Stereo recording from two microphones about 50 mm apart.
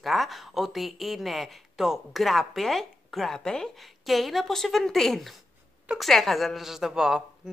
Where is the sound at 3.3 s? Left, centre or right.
Centre.